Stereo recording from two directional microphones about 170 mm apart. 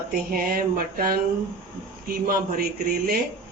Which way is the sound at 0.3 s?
60° right (ahead or behind).